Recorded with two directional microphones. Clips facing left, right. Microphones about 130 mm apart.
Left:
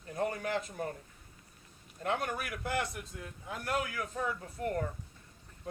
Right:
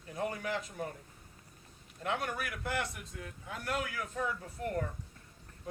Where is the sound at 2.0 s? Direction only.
40° left (ahead or behind).